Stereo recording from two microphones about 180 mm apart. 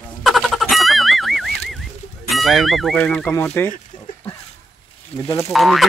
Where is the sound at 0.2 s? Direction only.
Centre (ahead or behind).